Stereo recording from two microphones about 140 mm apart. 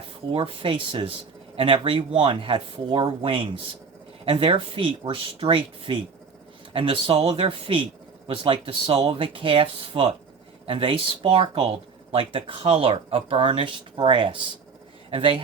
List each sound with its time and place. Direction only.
0.3 s a man's voice: 35° right (ahead or behind)